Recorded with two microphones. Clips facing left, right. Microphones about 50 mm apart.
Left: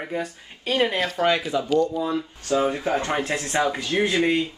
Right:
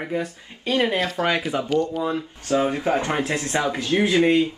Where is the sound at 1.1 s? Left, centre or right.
Right.